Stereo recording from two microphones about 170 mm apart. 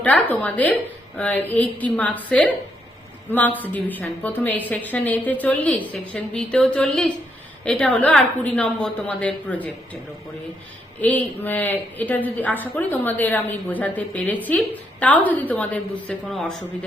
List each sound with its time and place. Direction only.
0.0 s a woman's voice: 10° left (ahead or behind)
11.0 s a woman's voice: 10° left (ahead or behind)